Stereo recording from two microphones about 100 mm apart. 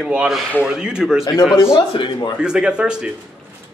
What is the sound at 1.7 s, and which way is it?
Speech, 60° left (ahead or behind).